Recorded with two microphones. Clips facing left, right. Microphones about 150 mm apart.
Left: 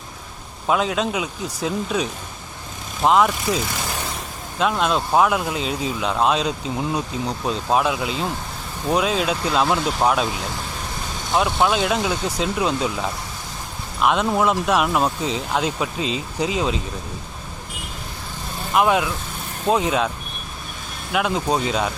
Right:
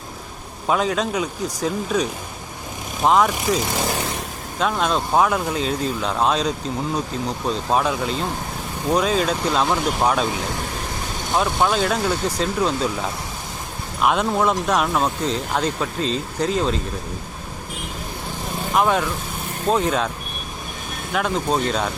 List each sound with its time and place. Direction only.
0.7 s speech: centre (ahead or behind)
4.6 s speech: centre (ahead or behind)
18.7 s speech: 5° left (ahead or behind)
21.1 s speech: 5° left (ahead or behind)